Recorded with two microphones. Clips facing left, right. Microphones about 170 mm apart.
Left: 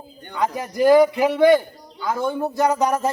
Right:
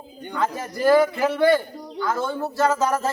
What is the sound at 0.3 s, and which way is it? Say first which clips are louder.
A man's voice: left 4 dB; 15° left (ahead or behind).